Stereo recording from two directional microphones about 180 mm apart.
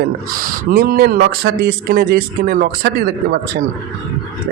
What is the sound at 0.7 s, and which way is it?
Speech, 55° right (ahead or behind).